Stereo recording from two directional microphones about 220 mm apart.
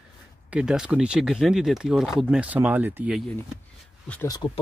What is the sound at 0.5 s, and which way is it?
Speech, 5° right (ahead or behind).